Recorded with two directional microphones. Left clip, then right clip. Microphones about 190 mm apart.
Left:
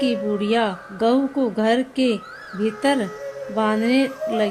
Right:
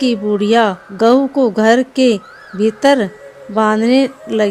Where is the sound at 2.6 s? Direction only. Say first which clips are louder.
Right 9 dB; 40° right (ahead or behind).